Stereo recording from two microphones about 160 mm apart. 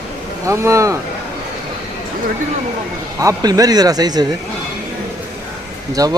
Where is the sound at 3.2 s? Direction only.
20° right (ahead or behind).